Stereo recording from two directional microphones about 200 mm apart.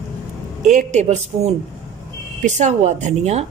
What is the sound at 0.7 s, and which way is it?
Speech, 35° right (ahead or behind).